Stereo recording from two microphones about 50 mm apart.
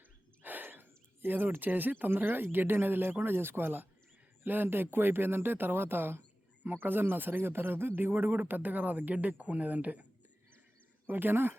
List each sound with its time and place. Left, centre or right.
0.4 s speech: right
6.6 s speech: right
11.0 s speech: right